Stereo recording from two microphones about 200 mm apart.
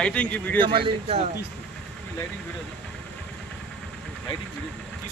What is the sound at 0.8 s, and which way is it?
Speech, 30° right (ahead or behind).